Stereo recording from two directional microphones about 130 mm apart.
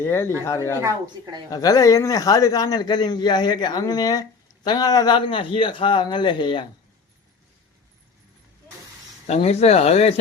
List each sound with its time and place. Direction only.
0.0 s a man's voice: 20° left (ahead or behind); by 6.7 s 40° left (ahead or behind)
9.2 s speech: 55° left (ahead or behind)